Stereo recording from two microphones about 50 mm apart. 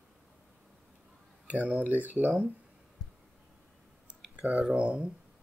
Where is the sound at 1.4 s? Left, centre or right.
Right.